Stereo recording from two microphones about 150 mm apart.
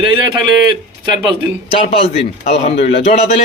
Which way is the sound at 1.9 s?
40° left (ahead or behind).